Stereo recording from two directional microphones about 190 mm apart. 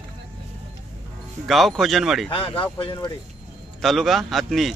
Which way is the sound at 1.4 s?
Centre (ahead or behind).